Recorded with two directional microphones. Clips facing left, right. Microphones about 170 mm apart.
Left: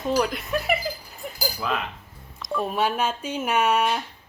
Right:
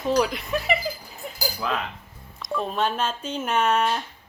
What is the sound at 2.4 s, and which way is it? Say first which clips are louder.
Speech: left 1 dB; 5° left (ahead or behind).